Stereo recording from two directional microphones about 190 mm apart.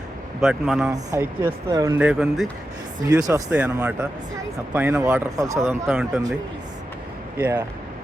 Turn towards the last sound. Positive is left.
turn(degrees=-15)  # may be behind; listen again after turning